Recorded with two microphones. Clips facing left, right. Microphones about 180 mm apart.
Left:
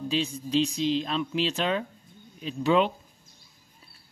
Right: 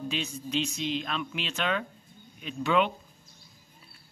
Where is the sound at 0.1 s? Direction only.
35° left (ahead or behind).